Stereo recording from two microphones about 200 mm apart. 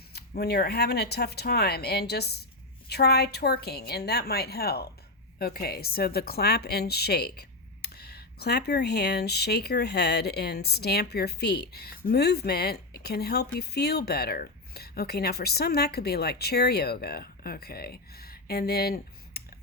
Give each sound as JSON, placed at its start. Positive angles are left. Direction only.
{"t": 0.1, "sound": "speech", "side_deg": 55}